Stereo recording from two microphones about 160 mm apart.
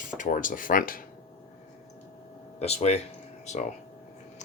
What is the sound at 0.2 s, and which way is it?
Speech, 55° left (ahead or behind).